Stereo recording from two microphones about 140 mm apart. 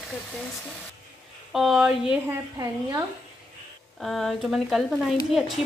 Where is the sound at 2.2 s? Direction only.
25° right (ahead or behind).